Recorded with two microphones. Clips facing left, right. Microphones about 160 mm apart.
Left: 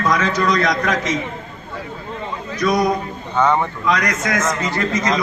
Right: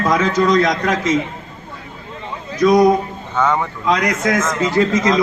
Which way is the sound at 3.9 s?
25° right (ahead or behind).